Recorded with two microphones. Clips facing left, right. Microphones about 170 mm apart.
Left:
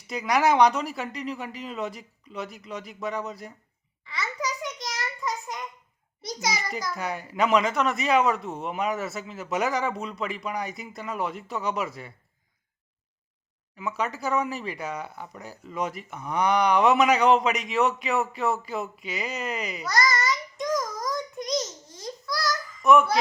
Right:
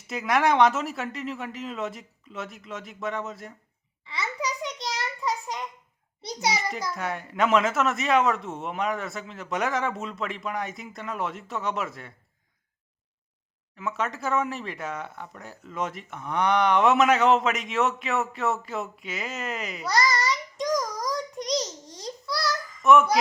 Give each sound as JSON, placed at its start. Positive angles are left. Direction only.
{"t": 0.1, "sound": "speech", "side_deg": 0}
{"t": 4.0, "sound": "a sound", "side_deg": -25}
{"t": 6.2, "sound": "a child's voice", "side_deg": -30}
{"t": 6.9, "sound": "speech", "side_deg": 0}
{"t": 13.7, "sound": "speech", "side_deg": 0}
{"t": 19.9, "sound": "child singing", "side_deg": -30}
{"t": 21.6, "sound": "a sound", "side_deg": -35}
{"t": 22.8, "sound": "speech", "side_deg": 0}